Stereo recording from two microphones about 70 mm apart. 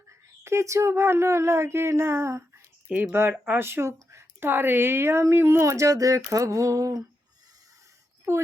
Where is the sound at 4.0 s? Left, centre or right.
Right.